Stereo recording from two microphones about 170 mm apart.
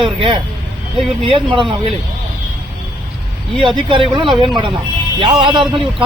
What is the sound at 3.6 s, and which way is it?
Speech, 30° right (ahead or behind).